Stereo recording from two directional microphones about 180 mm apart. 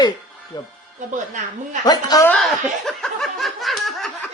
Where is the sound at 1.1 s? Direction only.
45° right (ahead or behind).